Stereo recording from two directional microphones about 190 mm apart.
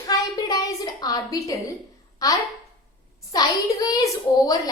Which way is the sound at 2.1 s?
20° left (ahead or behind).